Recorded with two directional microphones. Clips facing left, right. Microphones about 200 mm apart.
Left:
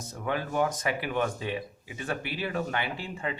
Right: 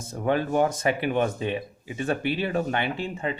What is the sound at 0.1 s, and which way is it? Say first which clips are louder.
Speech: right 7 dB; 30° right (ahead or behind).